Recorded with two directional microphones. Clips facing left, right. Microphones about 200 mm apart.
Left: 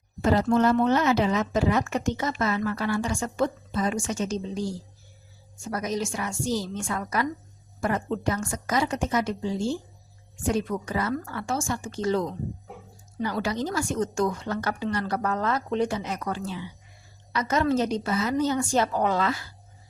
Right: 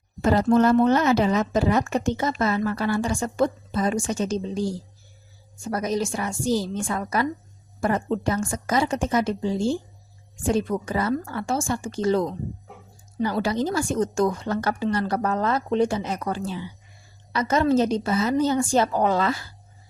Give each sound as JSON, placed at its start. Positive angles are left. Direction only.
{"t": 0.2, "sound": "a woman's voice", "side_deg": -45}
{"t": 5.7, "sound": "a woman's voice", "side_deg": -35}
{"t": 13.2, "sound": "a woman's voice", "side_deg": -30}